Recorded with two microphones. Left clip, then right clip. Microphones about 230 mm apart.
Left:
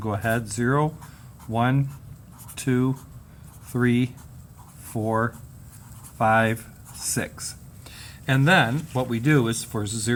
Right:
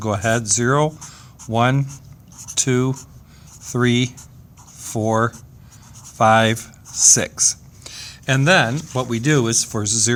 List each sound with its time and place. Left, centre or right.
0.0 s speech: right